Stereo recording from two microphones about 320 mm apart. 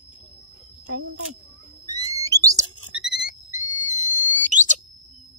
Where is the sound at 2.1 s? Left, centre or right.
Centre.